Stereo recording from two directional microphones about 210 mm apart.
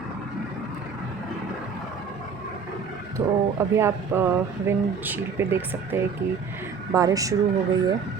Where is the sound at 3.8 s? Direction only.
10° right (ahead or behind).